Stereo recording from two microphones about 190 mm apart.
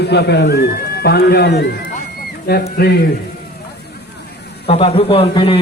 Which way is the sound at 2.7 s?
55° left (ahead or behind).